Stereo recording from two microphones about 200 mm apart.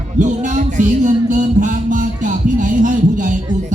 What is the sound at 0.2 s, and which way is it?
Music, 40° right (ahead or behind).